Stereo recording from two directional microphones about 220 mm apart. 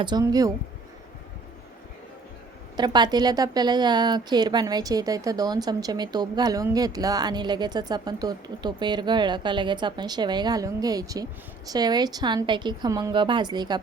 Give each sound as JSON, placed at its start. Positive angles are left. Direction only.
{"t": 0.0, "sound": "speech", "side_deg": -20}
{"t": 2.7, "sound": "a woman's voice", "side_deg": -20}